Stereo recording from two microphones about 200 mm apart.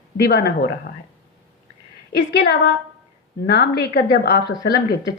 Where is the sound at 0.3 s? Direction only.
55° left (ahead or behind).